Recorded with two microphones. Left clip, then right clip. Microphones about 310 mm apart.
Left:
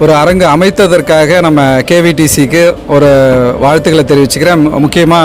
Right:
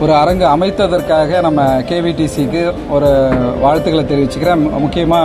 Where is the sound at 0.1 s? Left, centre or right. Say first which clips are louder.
Left 4 dB; left.